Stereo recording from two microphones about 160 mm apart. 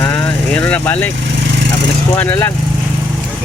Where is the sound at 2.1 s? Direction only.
10° left (ahead or behind).